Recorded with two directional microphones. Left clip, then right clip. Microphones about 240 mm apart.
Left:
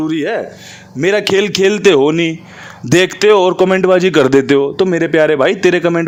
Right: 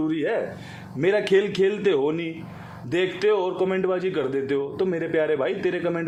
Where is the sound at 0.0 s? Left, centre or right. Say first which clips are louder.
Left 8 dB; left.